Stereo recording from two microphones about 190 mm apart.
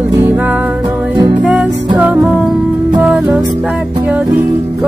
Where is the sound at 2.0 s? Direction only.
10° right (ahead or behind).